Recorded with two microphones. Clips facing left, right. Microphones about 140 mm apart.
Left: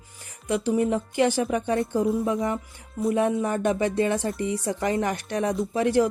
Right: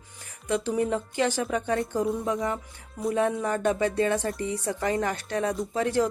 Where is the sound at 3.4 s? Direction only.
20° left (ahead or behind).